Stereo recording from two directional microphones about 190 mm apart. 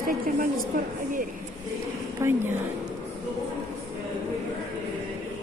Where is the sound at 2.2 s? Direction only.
15° right (ahead or behind).